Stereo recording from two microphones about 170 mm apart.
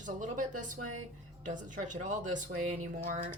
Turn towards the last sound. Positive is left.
turn(degrees=-50)  # may be behind; listen again after turning